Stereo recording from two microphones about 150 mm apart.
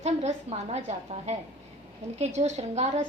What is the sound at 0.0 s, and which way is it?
A woman's voice, 50° right (ahead or behind).